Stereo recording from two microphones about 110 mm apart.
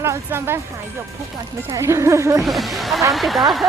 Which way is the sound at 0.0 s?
20° right (ahead or behind).